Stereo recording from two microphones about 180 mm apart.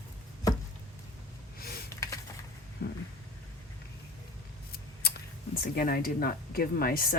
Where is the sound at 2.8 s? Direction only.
65° left (ahead or behind).